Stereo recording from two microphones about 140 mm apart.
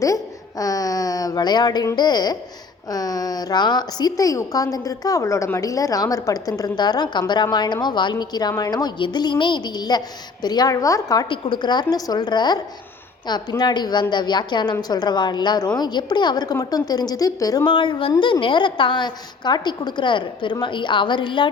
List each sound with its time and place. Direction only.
0.0 s a woman's voice: 25° left (ahead or behind)